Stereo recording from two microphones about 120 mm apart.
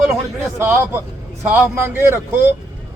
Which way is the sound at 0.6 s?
15° right (ahead or behind).